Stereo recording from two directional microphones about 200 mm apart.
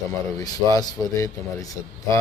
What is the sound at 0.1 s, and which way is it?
A man's voice, 15° left (ahead or behind).